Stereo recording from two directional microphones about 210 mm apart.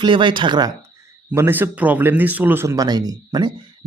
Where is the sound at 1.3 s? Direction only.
10° right (ahead or behind).